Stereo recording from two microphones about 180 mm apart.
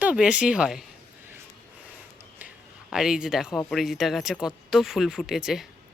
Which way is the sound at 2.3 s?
5° right (ahead or behind).